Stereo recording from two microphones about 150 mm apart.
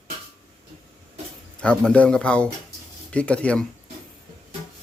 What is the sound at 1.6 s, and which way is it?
Speech, 5° left (ahead or behind).